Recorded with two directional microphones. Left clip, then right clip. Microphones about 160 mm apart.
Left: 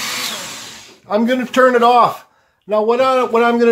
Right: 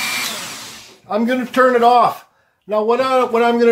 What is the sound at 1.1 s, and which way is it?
Speech, 25° left (ahead or behind).